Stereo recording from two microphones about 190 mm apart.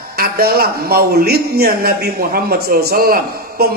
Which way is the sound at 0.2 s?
55° right (ahead or behind).